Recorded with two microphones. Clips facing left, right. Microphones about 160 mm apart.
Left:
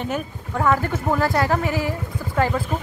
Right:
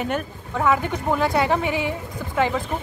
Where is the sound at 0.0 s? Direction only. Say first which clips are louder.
Right 1 dB; centre (ahead or behind).